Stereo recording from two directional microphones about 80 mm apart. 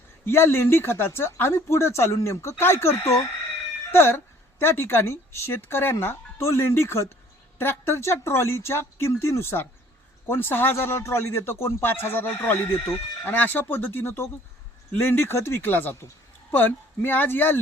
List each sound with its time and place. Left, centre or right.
0.3 s speech: left